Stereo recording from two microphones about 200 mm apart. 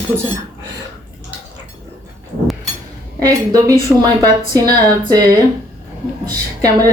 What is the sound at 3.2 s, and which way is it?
A woman's voice, 15° right (ahead or behind).